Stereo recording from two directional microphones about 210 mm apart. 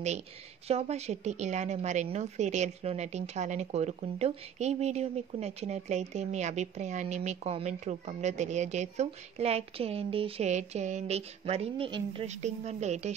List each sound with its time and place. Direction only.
0.7 s a woman's voice: 30° right (ahead or behind)